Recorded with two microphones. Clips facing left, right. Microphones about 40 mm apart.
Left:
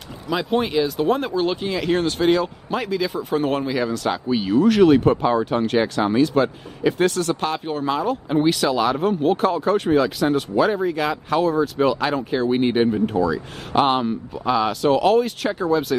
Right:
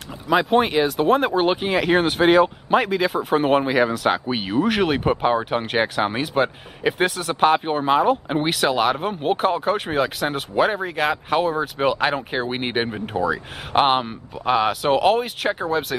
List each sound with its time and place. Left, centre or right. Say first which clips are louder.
0.5 s speech: right 2 dB; centre
1.3 s speech: right 3 dB; right
2.8 s speech: right 3 dB; centre
3.3 s speech: right 3 dB; right
6.9 s speech: left 2 dB; centre
7.4 s speech: right 5 dB; right
8.5 s speech: right 1 dB; centre
10.5 s speech: right 3 dB; right
10.8 s speech: left 1 dB; centre
11.3 s speech: left 5 dB; right
14.5 s speech: even; centre